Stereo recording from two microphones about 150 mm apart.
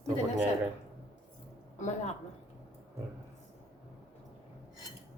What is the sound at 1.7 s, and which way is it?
Speech, 50° left (ahead or behind).